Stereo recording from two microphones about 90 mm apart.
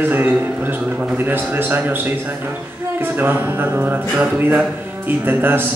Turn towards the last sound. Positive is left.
turn(degrees=-20)  # may be behind; listen again after turning